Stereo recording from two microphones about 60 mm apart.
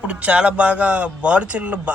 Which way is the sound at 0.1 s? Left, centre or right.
Centre.